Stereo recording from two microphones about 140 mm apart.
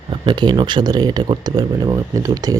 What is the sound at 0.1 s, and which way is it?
Speech, 35° right (ahead or behind).